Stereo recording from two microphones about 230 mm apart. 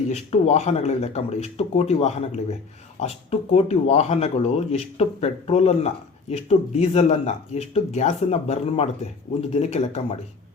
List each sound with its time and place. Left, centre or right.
0.1 s speech: left